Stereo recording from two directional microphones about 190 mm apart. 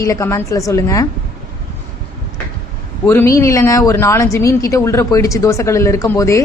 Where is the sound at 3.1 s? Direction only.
15° left (ahead or behind).